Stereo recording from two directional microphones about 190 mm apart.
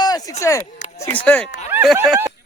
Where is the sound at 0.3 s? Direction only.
15° left (ahead or behind).